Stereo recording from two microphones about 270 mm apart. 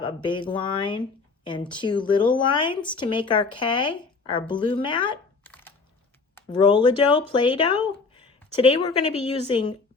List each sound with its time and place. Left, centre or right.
0.0 s speech: centre
5.4 s a sound: centre
6.3 s a woman's voice: centre